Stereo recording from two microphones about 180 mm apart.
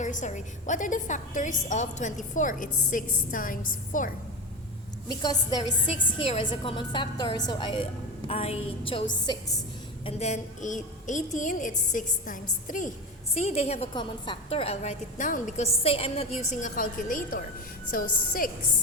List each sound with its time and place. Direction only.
0.0 s a woman's voice: 45° left (ahead or behind)
5.0 s a woman's voice: 20° left (ahead or behind)
10.1 s a woman's voice: 40° left (ahead or behind)
13.9 s a woman's voice: 25° left (ahead or behind); by 18.5 s 50° left (ahead or behind)